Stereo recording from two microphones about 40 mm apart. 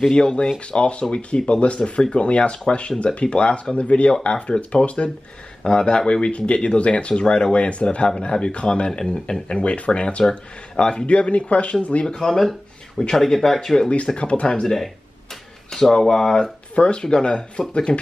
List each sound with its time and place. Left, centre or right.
0.1 s speech: left
12.1 s speech: centre
13.8 s speech: left
15.7 s speech: centre
16.7 s speech: left